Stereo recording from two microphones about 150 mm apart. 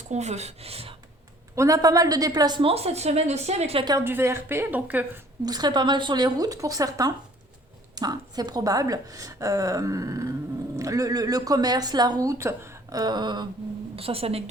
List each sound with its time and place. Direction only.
0.1 s speech: 50° right (ahead or behind)
1.5 s a woman's voice: 20° right (ahead or behind); by 3.8 s 45° right (ahead or behind)
3.8 s a woman's voice: 20° right (ahead or behind)
5.5 s speech: 25° right (ahead or behind)
13.9 s a woman's voice: 40° right (ahead or behind)